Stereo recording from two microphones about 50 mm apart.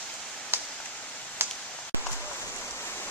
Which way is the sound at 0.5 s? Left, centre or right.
Right.